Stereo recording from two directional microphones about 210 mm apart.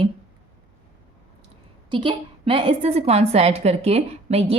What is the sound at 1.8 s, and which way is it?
Speech, 25° right (ahead or behind).